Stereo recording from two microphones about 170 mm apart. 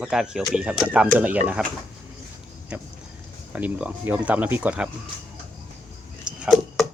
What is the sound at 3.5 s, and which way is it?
Speech, 10° right (ahead or behind).